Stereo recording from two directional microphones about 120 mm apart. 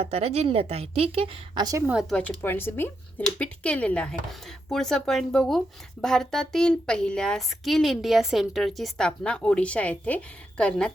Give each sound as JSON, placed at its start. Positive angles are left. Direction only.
{"t": 0.0, "sound": "a woman's voice", "side_deg": -55}
{"t": 1.9, "sound": "speech", "side_deg": -5}
{"t": 2.1, "sound": "speech", "side_deg": 15}